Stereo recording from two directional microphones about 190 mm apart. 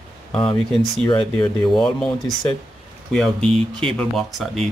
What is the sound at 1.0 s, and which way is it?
Speech, 25° left (ahead or behind).